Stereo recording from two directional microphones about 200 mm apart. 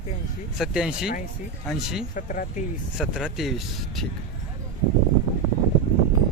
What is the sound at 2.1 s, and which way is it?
Speech, 40° left (ahead or behind).